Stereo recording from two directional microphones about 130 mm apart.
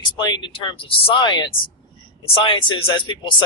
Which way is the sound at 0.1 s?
35° left (ahead or behind).